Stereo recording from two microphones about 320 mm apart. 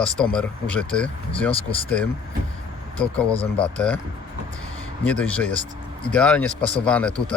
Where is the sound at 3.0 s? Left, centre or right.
Centre.